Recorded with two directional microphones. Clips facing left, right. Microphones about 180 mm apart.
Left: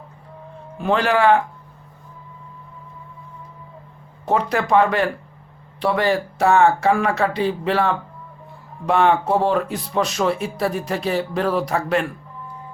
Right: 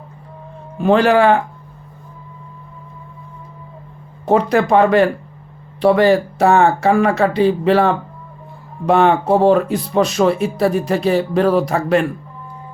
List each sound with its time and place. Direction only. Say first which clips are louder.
0.8 s speech: right 6 dB; 40° right (ahead or behind)
4.3 s speech: right 5 dB; 40° right (ahead or behind)